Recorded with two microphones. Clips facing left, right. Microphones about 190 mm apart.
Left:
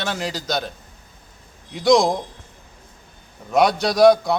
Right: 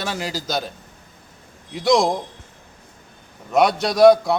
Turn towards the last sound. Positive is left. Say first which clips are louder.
# right 1 dB
turn(degrees=0)  # may be behind; listen again after turning